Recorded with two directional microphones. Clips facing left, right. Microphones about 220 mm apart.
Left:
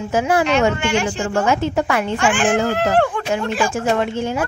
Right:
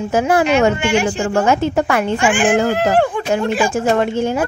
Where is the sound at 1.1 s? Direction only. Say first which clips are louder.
Right 3 dB; 50° right (ahead or behind).